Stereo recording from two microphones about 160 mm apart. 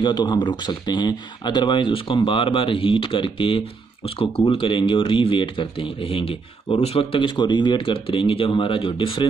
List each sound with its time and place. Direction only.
0.0 s speech: 25° left (ahead or behind)